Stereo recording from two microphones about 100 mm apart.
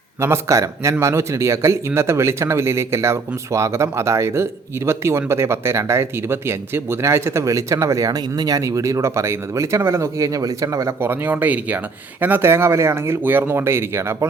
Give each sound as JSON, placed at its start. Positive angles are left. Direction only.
{"t": 0.2, "sound": "speech", "side_deg": -30}
{"t": 11.0, "sound": "speech", "side_deg": -20}